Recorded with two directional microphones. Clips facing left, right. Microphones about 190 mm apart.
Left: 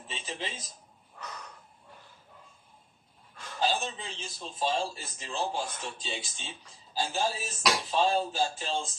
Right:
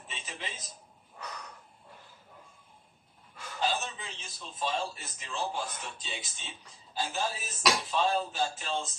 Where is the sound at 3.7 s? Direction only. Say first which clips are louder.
Left 2 dB; 30° left (ahead or behind).